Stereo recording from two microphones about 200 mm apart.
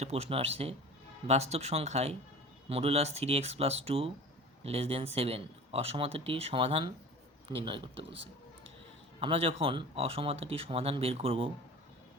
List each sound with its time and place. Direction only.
0.0 s speech: 30° right (ahead or behind)
9.2 s speech: 30° right (ahead or behind)